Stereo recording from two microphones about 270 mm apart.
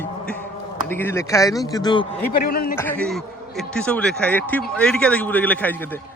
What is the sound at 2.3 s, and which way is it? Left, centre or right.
Speech, left.